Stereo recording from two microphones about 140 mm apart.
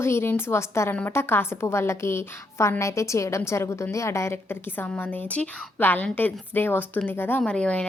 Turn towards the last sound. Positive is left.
turn(degrees=5)  # may be behind; listen again after turning